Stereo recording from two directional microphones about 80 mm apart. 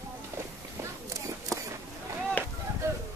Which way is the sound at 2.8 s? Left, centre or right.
Right.